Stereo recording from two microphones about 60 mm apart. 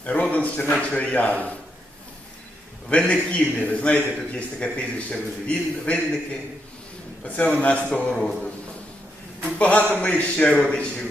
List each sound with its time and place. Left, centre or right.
0.0 s a man's voice: left
2.9 s a man's voice: left
7.3 s a man's voice: left
9.6 s a man's voice: left